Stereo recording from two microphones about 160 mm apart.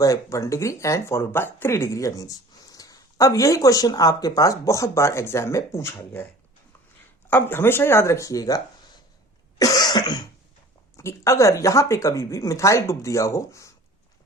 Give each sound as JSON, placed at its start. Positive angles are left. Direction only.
{"t": 0.0, "sound": "speech", "side_deg": 20}
{"t": 7.3, "sound": "speech", "side_deg": 10}
{"t": 9.6, "sound": "cough", "side_deg": 25}
{"t": 10.9, "sound": "speech", "side_deg": 20}